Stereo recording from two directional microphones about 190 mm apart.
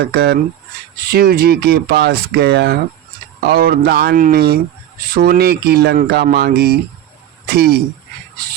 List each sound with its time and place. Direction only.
0.0 s speech: 60° right (ahead or behind)